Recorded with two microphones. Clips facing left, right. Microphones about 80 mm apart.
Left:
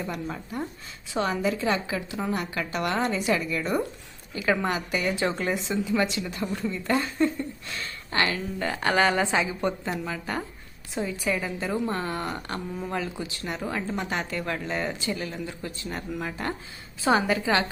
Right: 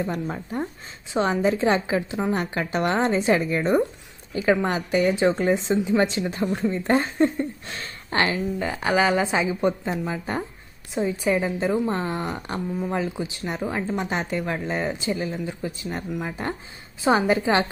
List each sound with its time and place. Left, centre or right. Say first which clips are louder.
0.0 s speech: right 5 dB; right
8.5 s a woman's voice: even; centre; by 17.7 s right